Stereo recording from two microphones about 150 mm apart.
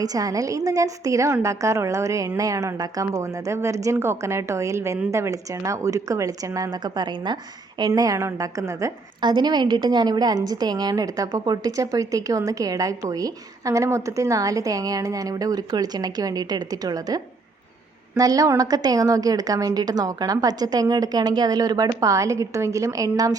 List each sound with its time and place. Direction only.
0.0 s a woman's voice: 25° right (ahead or behind)